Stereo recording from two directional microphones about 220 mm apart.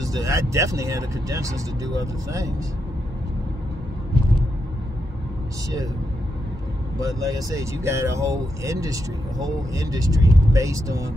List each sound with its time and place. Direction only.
0.0 s speech: 15° right (ahead or behind)
7.0 s speech: 15° right (ahead or behind)